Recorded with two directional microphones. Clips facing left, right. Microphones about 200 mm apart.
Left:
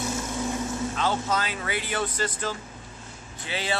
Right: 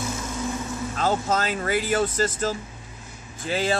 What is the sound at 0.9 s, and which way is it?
Speech, 45° right (ahead or behind).